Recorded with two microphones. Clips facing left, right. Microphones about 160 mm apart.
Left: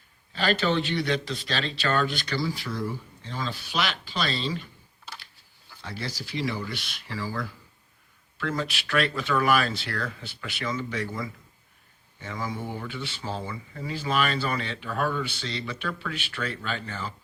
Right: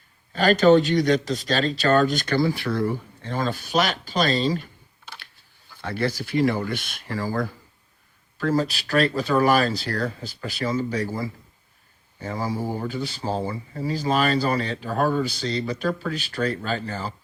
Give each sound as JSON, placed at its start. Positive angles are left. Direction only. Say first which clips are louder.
{"t": 0.3, "sound": "speech", "louder": "right 9 dB", "side_deg": -45}
{"t": 5.8, "sound": "speech", "louder": "right 10 dB", "side_deg": -55}